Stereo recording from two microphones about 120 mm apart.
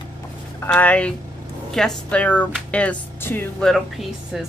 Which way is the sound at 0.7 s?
10° left (ahead or behind).